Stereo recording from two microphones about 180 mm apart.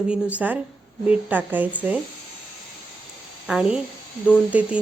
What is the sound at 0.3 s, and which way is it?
Speech, 10° right (ahead or behind).